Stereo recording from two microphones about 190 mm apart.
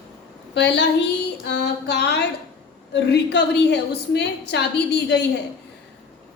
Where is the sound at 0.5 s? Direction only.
65° left (ahead or behind).